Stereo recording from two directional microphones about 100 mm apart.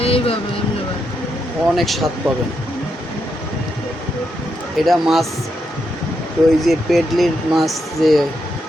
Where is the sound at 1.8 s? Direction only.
Centre (ahead or behind).